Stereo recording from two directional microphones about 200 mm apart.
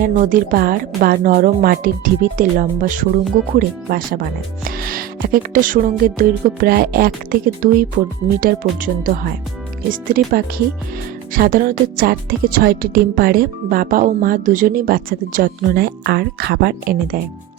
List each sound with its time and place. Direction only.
0.0 s speech: 40° right (ahead or behind)